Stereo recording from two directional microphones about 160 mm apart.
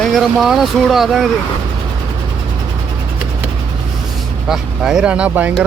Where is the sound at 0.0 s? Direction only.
Centre (ahead or behind).